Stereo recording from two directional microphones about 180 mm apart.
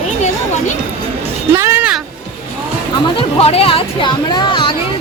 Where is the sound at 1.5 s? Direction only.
15° right (ahead or behind).